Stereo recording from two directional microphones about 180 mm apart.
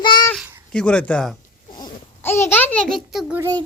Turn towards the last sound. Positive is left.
turn(degrees=-5)  # may be behind; listen again after turning